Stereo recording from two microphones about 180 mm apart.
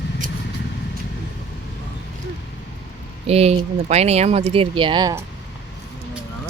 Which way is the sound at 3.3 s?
35° right (ahead or behind).